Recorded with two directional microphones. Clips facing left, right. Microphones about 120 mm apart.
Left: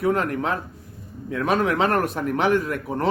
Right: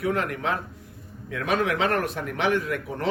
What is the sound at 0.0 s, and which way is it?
Speech, 40° left (ahead or behind).